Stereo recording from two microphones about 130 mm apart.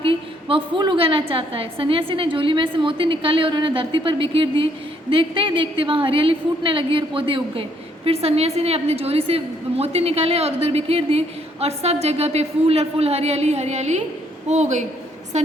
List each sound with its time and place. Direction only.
0.0 s a woman's voice: 40° right (ahead or behind); by 15.5 s 60° right (ahead or behind)